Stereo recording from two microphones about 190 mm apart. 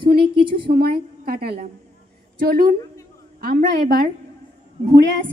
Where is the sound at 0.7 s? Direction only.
55° right (ahead or behind).